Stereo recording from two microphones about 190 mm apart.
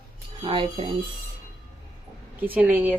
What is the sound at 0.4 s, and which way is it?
Speech, 25° right (ahead or behind).